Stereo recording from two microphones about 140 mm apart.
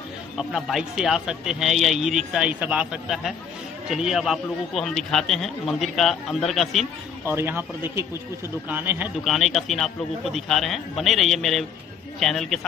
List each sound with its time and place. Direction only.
0.4 s a man's voice: 5° right (ahead or behind)
7.2 s a man's voice: 15° right (ahead or behind)
9.2 s a man's voice: centre (ahead or behind)